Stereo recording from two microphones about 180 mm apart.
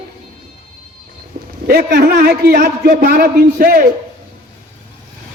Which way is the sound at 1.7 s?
60° right (ahead or behind).